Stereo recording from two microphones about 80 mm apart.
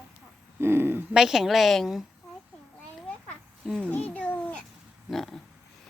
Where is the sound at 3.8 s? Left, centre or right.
Centre.